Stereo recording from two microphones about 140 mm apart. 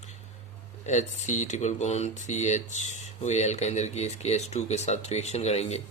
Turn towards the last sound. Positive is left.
turn(degrees=50)  # may be behind; listen again after turning